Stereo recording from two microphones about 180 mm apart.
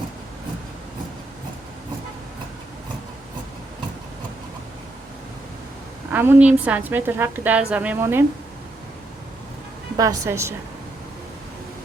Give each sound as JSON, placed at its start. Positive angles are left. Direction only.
{"t": 6.1, "sound": "a woman's voice", "side_deg": -10}
{"t": 10.0, "sound": "a woman's voice", "side_deg": -15}